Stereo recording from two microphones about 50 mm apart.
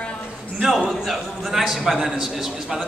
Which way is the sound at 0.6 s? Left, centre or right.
Centre.